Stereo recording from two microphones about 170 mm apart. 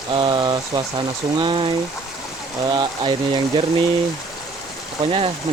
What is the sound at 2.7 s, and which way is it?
Speech, 30° right (ahead or behind).